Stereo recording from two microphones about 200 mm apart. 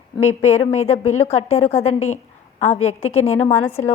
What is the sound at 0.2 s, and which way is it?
Speech, 30° left (ahead or behind).